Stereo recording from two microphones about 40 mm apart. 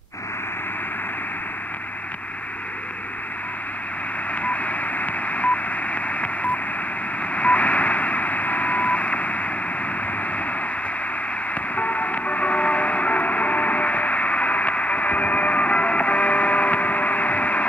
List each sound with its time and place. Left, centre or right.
4.4 s telephone dialing: left
7.3 s radio: left
11.7 s music: left